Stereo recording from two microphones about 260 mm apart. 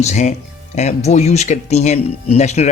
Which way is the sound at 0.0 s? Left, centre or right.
Left.